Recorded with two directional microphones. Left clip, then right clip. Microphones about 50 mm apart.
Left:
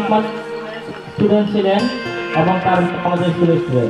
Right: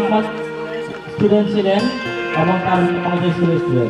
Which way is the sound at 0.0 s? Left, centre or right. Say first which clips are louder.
Even; right.